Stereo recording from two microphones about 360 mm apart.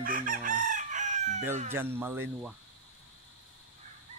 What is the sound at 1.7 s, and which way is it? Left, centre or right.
Speech, centre.